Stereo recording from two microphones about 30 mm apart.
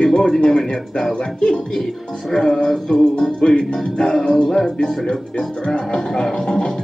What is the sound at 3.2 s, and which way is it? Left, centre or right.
Music, left.